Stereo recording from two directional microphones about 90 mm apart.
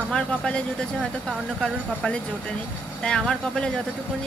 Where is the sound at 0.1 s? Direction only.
10° left (ahead or behind).